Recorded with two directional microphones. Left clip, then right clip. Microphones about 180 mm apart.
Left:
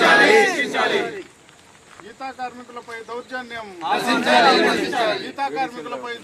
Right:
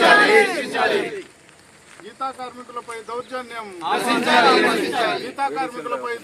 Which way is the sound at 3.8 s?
15° left (ahead or behind).